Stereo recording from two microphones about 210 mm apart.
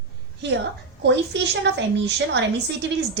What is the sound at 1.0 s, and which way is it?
A woman's voice, 55° right (ahead or behind).